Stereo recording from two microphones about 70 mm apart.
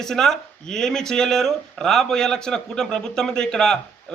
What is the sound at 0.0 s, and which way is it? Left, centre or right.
Speech, centre.